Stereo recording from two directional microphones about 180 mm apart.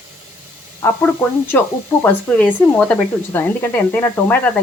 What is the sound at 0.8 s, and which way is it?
Speech, 15° left (ahead or behind).